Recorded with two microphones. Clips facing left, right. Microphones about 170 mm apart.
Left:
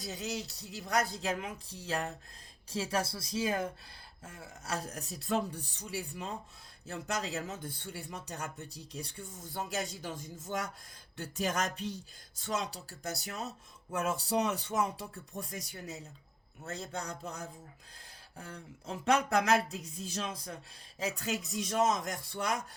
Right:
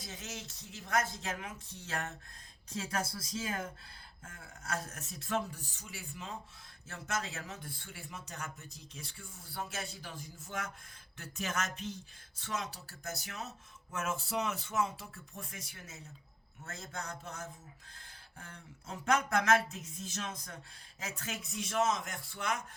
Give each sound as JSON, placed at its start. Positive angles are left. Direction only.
{"t": 0.0, "sound": "speech", "side_deg": 35}
{"t": 13.0, "sound": "speech", "side_deg": 35}